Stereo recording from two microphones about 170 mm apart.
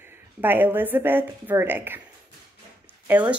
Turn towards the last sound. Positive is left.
turn(degrees=-10)  # may be behind; listen again after turning